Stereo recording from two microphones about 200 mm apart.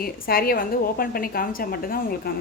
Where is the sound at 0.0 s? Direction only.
50° left (ahead or behind).